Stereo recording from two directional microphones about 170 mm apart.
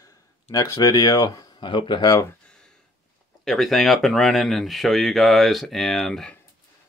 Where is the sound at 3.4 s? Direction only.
Centre (ahead or behind).